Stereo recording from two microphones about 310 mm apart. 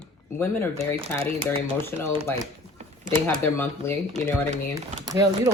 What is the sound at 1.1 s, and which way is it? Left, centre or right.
Speech, centre.